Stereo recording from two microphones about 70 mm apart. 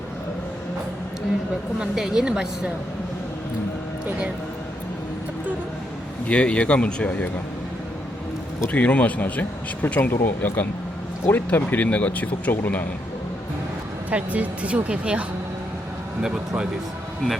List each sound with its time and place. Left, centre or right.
1.8 s a woman's voice: centre
6.2 s speech: centre
8.7 s speech: centre
14.1 s speech: right